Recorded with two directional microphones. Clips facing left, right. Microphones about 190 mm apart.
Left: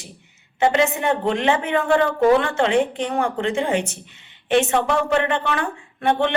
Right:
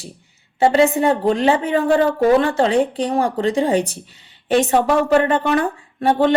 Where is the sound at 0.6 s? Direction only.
35° right (ahead or behind).